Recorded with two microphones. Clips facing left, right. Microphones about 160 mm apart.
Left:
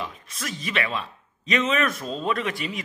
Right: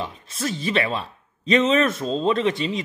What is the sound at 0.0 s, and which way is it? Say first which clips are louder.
Speech: right 6 dB; 30° right (ahead or behind).